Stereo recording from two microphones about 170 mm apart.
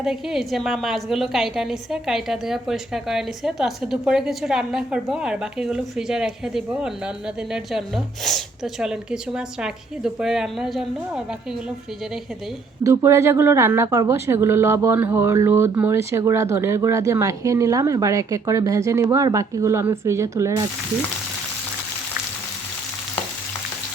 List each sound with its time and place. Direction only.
0.0 s a woman's voice: 5° right (ahead or behind)
12.8 s a woman's voice: 15° right (ahead or behind)